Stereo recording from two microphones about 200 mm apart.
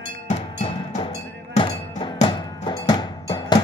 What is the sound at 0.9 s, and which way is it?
Music, 30° left (ahead or behind).